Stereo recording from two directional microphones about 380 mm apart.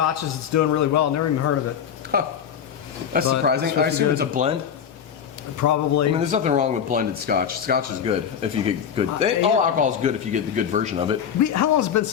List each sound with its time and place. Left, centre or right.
0.0 s a man's voice: left
2.1 s speech: right
5.6 s a man's voice: left
6.1 s speech: centre
11.3 s a man's voice: left